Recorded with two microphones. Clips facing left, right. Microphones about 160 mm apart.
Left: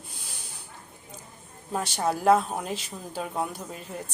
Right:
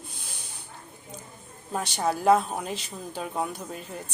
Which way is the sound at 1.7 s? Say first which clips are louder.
Even; centre (ahead or behind).